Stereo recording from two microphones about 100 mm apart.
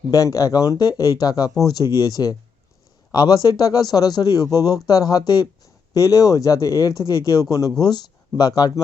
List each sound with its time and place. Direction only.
0.1 s a man's voice: 35° left (ahead or behind)